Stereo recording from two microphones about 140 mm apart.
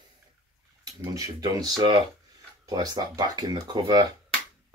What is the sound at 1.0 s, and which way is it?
Speech, 25° right (ahead or behind).